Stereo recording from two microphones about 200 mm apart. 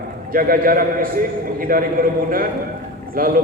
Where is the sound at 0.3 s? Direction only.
45° right (ahead or behind).